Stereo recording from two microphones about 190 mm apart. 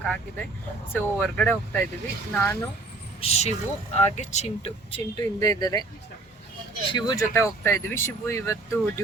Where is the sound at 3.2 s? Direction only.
35° left (ahead or behind).